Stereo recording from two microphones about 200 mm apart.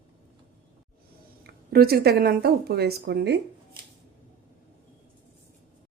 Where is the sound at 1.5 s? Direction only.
50° right (ahead or behind).